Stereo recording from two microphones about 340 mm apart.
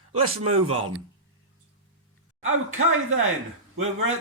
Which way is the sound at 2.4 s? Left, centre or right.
Right.